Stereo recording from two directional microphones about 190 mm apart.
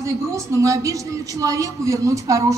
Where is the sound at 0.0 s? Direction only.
15° right (ahead or behind).